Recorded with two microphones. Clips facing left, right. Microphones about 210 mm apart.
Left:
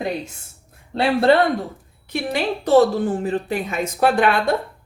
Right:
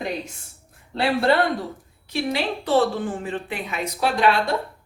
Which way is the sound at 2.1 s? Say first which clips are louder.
Left 2 dB; 45° left (ahead or behind).